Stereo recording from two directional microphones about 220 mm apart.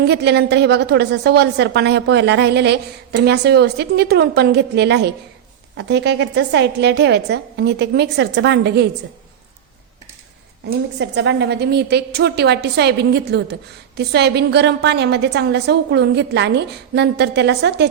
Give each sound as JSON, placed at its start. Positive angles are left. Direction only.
{"t": 0.0, "sound": "a woman's voice", "side_deg": -50}
{"t": 10.7, "sound": "a woman's voice", "side_deg": -50}